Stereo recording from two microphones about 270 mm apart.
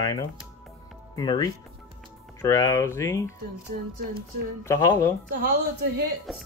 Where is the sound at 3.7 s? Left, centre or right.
Right.